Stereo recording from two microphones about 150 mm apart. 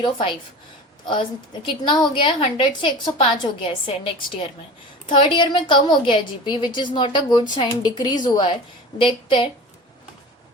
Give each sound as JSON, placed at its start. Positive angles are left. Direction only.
{"t": 0.0, "sound": "a woman's voice", "side_deg": 35}